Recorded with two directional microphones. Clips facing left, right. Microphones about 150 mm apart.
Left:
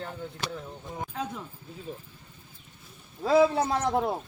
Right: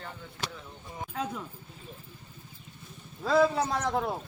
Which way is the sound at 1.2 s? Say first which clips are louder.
Right 2 dB; 10° left (ahead or behind).